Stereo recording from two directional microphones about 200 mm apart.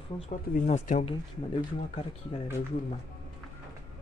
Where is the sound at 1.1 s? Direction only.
25° left (ahead or behind).